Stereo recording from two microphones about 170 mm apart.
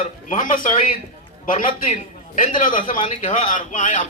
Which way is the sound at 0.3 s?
50° left (ahead or behind).